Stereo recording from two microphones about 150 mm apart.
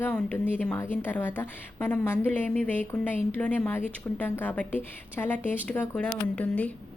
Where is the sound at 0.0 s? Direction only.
10° left (ahead or behind).